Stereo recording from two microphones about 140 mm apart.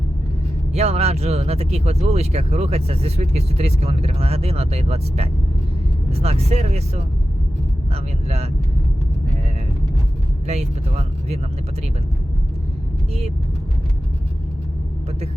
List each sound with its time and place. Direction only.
0.7 s speech: 50° right (ahead or behind)
10.4 s speech: 50° right (ahead or behind)